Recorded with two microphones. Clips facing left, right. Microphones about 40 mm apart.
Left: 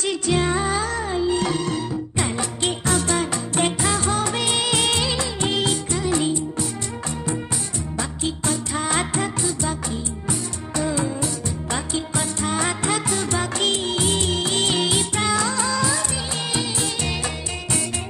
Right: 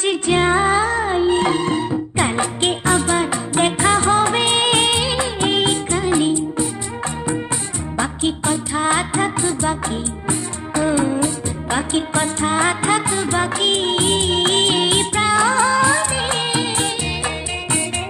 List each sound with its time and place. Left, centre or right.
0.0 s music: right
8.0 s music: right
8.5 s music: right
14.7 s music: right